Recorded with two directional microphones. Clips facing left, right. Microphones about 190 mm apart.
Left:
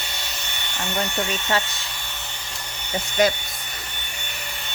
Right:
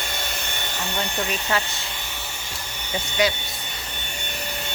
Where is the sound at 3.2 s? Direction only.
50° left (ahead or behind).